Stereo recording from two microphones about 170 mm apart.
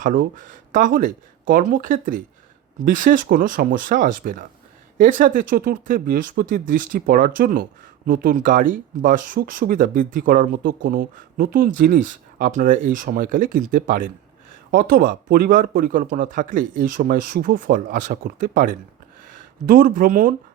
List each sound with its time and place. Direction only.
0.0 s speech: 50° right (ahead or behind)